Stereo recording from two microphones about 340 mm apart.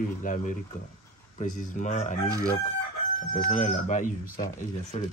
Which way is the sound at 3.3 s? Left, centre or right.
Centre.